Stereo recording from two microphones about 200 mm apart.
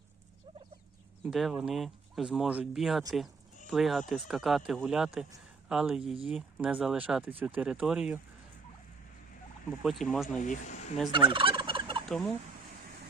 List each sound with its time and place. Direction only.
1.2 s speech: centre (ahead or behind)
9.8 s speech: centre (ahead or behind)
10.4 s speech: 40° left (ahead or behind)
11.1 s fowl: 25° right (ahead or behind)
12.0 s speech: 5° left (ahead or behind)